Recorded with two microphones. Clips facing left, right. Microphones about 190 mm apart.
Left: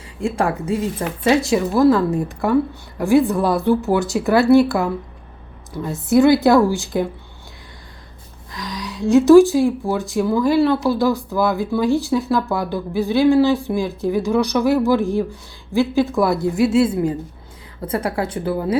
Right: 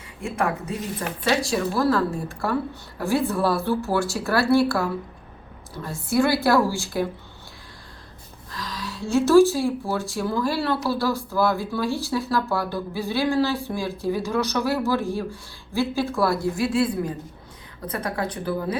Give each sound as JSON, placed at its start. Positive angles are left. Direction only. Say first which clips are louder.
{"t": 0.2, "sound": "a woman's voice", "louder": "left 5 dB", "side_deg": 30}
{"t": 8.7, "sound": "speech", "louder": "left 8 dB", "side_deg": 15}